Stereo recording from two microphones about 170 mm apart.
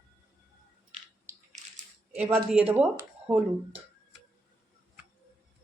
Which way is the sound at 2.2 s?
10° right (ahead or behind).